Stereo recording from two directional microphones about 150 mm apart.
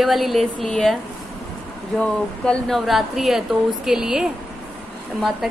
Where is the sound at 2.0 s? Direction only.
5° left (ahead or behind).